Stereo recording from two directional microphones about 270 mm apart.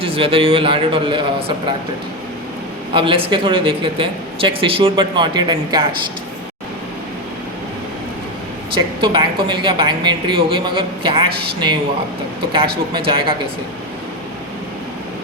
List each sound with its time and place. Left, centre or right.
0.0 s speech: right
2.9 s speech: centre
9.0 s a woman's voice: centre
12.9 s a woman's voice: centre